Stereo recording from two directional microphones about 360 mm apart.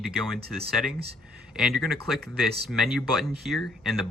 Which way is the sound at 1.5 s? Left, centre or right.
Centre.